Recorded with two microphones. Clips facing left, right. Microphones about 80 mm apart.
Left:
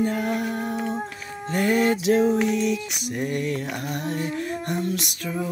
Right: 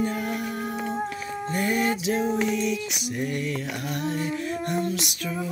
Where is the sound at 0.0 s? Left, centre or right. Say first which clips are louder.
Left 3 dB; left.